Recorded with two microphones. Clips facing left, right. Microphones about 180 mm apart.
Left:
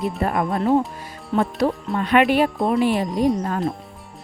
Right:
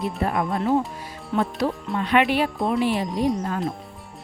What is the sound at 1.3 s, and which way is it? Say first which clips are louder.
Speech: left 3 dB; 40° left (ahead or behind).